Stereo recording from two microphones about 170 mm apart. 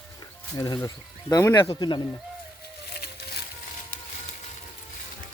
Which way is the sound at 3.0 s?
70° left (ahead or behind).